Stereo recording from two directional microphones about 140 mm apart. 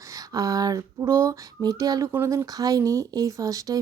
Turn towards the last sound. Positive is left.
turn(degrees=-25)  # may be behind; listen again after turning